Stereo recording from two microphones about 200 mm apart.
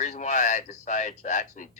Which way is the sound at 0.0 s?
35° left (ahead or behind).